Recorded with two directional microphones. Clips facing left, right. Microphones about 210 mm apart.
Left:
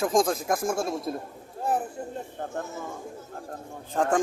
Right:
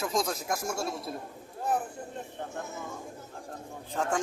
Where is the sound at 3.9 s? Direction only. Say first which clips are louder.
Left 6 dB; 50° left (ahead or behind).